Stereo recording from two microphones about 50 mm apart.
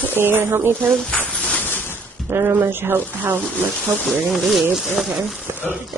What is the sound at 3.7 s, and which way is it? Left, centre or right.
Speech, centre.